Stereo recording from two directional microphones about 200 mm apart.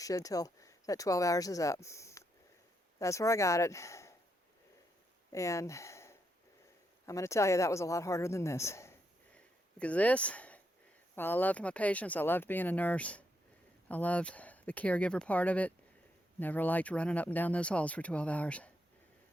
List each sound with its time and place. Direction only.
0.0 s speech: 15° left (ahead or behind)
5.3 s a woman's voice: 15° left (ahead or behind)